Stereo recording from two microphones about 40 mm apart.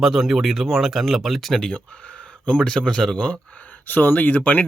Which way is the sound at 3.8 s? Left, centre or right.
Left.